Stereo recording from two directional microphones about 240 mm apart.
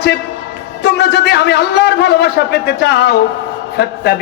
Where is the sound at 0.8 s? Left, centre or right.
Left.